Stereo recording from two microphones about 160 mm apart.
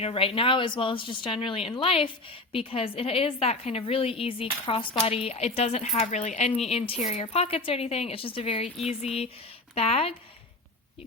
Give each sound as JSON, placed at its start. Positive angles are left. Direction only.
{"t": 0.0, "sound": "a woman's voice", "side_deg": 40}